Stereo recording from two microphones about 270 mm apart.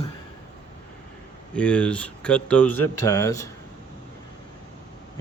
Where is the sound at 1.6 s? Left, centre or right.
Centre.